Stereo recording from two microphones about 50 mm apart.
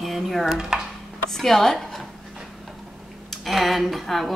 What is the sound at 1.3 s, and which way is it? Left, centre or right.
Speech, centre.